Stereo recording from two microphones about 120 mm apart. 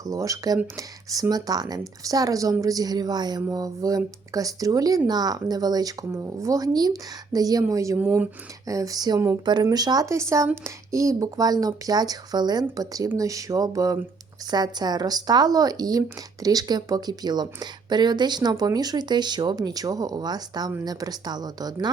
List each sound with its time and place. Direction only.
0.0 s speech: 30° right (ahead or behind)
7.9 s speech: 15° right (ahead or behind)
8.6 s speech: 30° right (ahead or behind)